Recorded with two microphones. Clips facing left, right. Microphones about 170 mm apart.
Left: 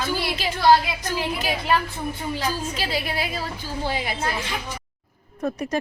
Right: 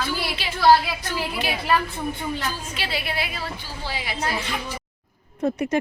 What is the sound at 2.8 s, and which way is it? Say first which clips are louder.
Speech: left 2 dB; 40° left (ahead or behind).